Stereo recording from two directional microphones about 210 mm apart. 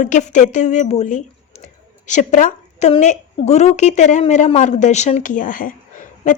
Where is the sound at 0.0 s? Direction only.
35° left (ahead or behind).